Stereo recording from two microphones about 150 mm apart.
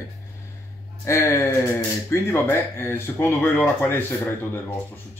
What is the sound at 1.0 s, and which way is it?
Speech, 20° left (ahead or behind).